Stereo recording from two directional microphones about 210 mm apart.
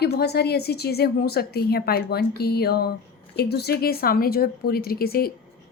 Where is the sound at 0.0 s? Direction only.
50° left (ahead or behind).